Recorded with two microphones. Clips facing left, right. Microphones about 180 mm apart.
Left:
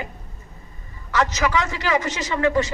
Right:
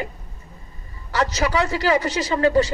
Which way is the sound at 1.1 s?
35° right (ahead or behind).